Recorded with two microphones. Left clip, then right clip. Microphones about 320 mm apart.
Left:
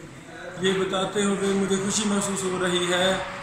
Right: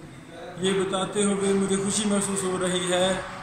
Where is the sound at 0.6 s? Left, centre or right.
Centre.